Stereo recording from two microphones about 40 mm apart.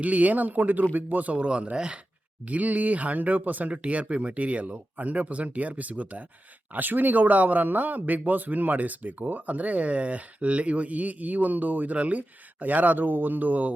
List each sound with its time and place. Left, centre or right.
0.0 s speech: right
1.4 s speech: right
2.4 s speech: right
6.7 s speech: right